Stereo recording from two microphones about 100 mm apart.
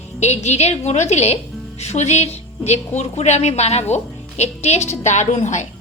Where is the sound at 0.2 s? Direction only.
90° left.